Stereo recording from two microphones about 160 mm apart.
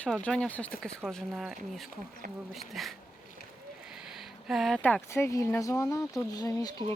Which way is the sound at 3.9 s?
Centre (ahead or behind).